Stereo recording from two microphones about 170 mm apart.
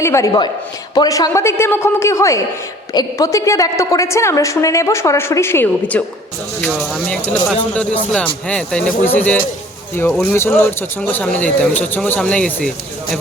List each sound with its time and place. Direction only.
0.0 s a woman's voice: 15° left (ahead or behind)